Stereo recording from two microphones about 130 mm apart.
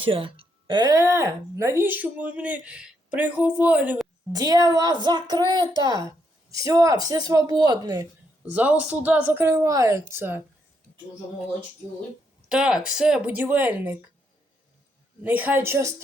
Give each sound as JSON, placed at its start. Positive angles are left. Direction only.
{"t": 0.0, "sound": "speech", "side_deg": -45}
{"t": 4.3, "sound": "speech", "side_deg": -25}
{"t": 8.4, "sound": "speech", "side_deg": -10}
{"t": 12.5, "sound": "speech", "side_deg": -5}
{"t": 15.2, "sound": "speech", "side_deg": -15}